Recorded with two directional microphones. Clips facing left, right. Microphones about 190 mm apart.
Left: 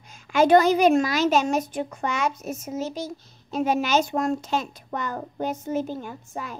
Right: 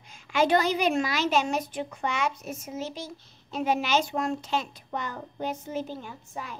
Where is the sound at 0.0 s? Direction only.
45° left (ahead or behind).